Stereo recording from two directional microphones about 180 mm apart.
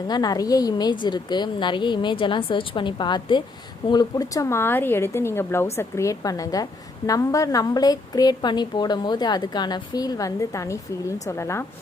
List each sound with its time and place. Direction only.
0.1 s a woman's voice: 20° left (ahead or behind)